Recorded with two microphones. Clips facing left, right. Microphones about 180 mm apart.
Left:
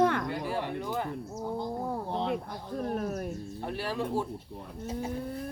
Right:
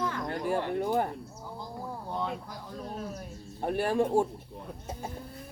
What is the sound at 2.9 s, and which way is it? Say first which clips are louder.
Speech: left 6 dB; 60° left (ahead or behind).